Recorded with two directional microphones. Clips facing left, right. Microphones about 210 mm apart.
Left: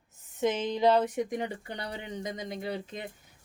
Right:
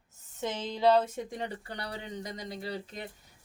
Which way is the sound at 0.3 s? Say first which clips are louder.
Left 6 dB; 15° left (ahead or behind).